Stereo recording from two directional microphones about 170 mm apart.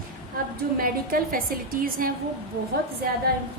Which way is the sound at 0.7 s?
55° right (ahead or behind).